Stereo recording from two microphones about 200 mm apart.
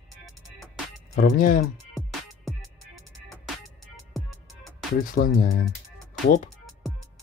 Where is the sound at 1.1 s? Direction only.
45° left (ahead or behind).